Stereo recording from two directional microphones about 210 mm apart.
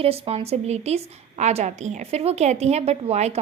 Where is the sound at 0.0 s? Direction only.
30° right (ahead or behind).